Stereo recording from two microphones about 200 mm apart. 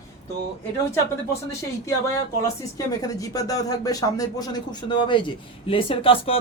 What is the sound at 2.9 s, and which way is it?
Speech, 15° left (ahead or behind).